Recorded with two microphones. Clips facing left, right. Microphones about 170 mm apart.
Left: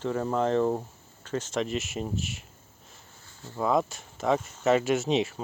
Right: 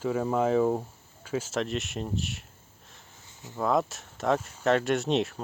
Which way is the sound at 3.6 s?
Centre (ahead or behind).